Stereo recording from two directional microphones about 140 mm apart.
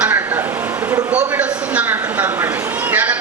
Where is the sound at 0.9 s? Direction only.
10° right (ahead or behind).